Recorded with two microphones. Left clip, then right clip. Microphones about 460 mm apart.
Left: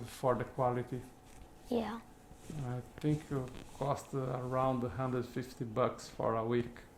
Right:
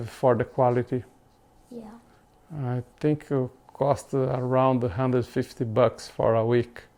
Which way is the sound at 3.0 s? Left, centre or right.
Right.